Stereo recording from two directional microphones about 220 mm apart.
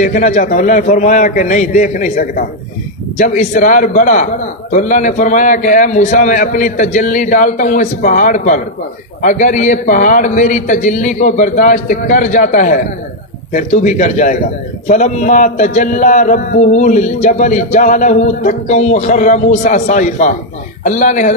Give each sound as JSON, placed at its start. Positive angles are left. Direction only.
{"t": 0.0, "sound": "a man's voice", "side_deg": 35}